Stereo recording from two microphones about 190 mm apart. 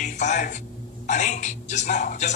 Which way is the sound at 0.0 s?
40° left (ahead or behind).